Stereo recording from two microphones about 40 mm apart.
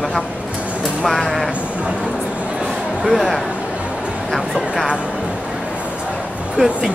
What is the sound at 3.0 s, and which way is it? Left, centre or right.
Speech, centre.